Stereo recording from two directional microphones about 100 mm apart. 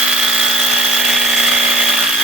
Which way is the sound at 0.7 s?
5° right (ahead or behind).